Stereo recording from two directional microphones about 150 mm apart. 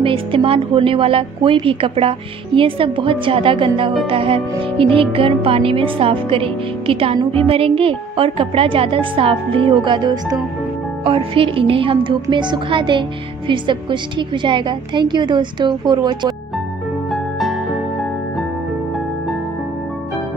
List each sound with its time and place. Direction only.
0.0 s a woman's voice: 35° right (ahead or behind)
17.1 s music: centre (ahead or behind)